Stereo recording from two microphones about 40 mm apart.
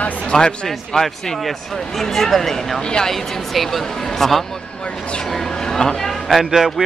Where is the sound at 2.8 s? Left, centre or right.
Left.